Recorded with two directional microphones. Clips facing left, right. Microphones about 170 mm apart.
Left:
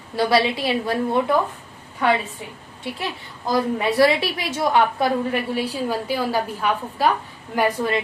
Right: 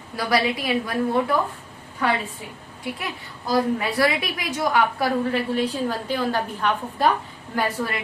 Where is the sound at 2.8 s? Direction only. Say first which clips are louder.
Left 2 dB; 30° left (ahead or behind).